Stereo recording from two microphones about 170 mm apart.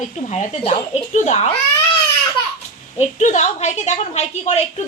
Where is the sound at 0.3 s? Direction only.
40° left (ahead or behind).